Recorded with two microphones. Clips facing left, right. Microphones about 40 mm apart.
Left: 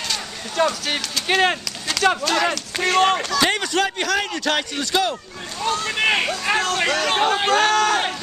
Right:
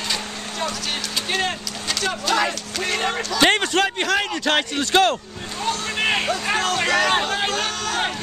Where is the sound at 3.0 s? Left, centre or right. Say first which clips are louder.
Left 6 dB; left.